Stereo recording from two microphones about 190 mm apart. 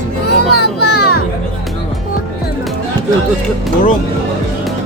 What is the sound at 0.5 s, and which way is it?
Children playing, 55° left (ahead or behind).